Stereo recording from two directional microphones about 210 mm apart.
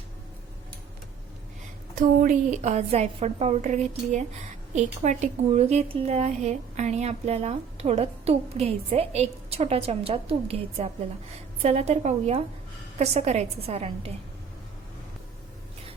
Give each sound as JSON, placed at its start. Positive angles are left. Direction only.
{"t": 2.0, "sound": "a woman's voice", "side_deg": -40}